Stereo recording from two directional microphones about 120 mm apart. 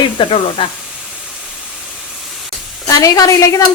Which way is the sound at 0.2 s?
45° left (ahead or behind).